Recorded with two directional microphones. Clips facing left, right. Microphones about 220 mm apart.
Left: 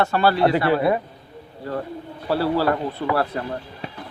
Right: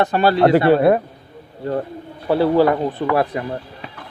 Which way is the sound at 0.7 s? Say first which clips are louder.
Right 6 dB; 55° right (ahead or behind).